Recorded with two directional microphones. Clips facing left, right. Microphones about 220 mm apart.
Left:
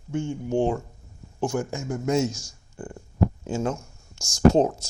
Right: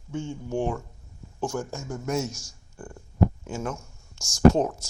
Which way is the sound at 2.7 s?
20° left (ahead or behind).